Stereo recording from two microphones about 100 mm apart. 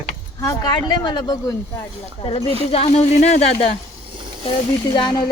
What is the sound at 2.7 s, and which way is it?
Speech, 90° left.